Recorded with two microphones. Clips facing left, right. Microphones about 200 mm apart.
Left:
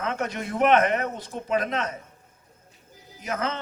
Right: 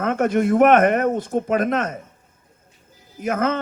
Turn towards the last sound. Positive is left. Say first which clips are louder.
# right 8 dB
turn(degrees=-50)  # may be behind; listen again after turning